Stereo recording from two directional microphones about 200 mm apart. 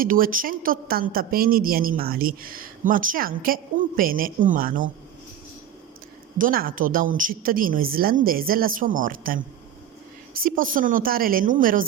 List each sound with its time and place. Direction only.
0.0 s a woman's voice: 45° right (ahead or behind)
6.4 s a woman's voice: 45° right (ahead or behind)